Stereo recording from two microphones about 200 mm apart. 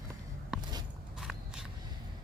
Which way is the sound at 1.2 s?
5° right (ahead or behind).